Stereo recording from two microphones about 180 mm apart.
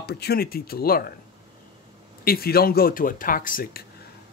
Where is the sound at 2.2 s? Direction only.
60° left (ahead or behind).